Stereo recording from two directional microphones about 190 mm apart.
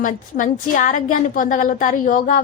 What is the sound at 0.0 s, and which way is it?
A woman's voice, 45° left (ahead or behind).